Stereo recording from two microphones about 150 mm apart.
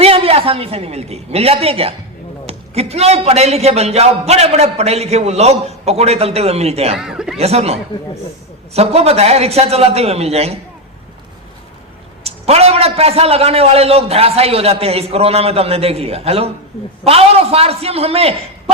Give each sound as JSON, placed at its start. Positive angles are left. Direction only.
{"t": 0.0, "sound": "a woman's voice", "side_deg": -40}
{"t": 6.9, "sound": "speech", "side_deg": -5}
{"t": 7.3, "sound": "a man's voice", "side_deg": -45}
{"t": 12.2, "sound": "a man's voice", "side_deg": -45}